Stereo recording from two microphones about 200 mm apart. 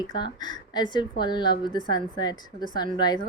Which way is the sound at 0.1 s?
20° left (ahead or behind).